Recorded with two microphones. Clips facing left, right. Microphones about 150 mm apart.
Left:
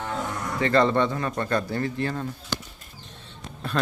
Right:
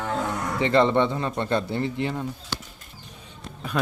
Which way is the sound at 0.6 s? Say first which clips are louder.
Right 1 dB; 20° right (ahead or behind).